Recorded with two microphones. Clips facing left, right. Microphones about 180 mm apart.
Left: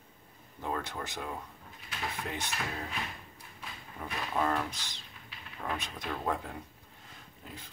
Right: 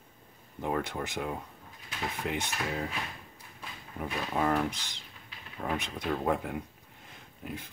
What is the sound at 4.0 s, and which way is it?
Speech, 15° right (ahead or behind).